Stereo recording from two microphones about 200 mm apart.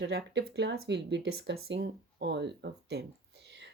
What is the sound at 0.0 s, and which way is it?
Speech, 60° right (ahead or behind).